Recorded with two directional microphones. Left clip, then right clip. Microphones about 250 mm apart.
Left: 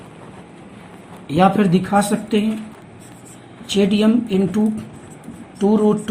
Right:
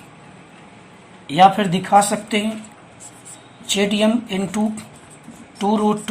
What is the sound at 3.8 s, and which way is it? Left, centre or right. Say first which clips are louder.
Speech: left 2 dB; right.